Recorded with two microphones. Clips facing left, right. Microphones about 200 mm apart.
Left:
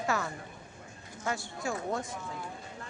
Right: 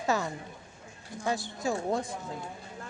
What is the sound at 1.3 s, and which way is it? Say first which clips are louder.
Speech: right 4 dB; 35° right (ahead or behind).